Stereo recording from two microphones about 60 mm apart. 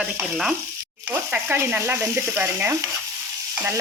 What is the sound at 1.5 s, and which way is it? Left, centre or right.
Frying, right.